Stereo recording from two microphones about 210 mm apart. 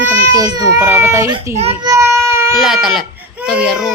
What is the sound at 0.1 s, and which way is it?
Speech, 15° right (ahead or behind).